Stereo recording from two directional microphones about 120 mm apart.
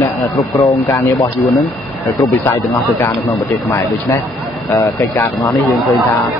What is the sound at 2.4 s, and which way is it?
Speech, 25° left (ahead or behind).